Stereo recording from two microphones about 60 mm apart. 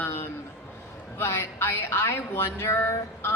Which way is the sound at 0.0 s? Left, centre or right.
Left.